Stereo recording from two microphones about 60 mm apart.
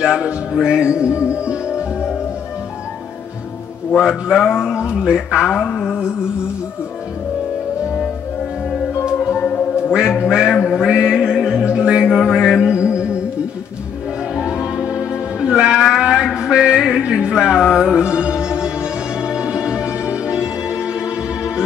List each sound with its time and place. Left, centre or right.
0.0 s speech: centre
4.0 s a man's voice: centre
5.6 s mantra: left
5.9 s speech: centre
9.9 s speech: centre
10.8 s music: centre
15.4 s speech: centre
16.0 s a sound: centre
16.3 s music: centre